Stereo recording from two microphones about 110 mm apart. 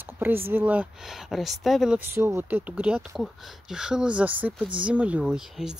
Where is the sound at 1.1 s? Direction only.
Centre (ahead or behind).